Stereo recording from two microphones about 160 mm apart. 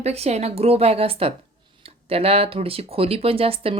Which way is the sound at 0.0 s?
40° right (ahead or behind).